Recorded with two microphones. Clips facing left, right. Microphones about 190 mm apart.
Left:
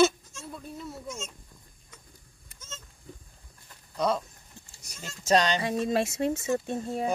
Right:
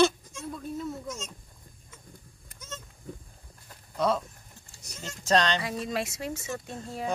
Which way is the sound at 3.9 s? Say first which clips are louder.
Right 1 dB; centre (ahead or behind).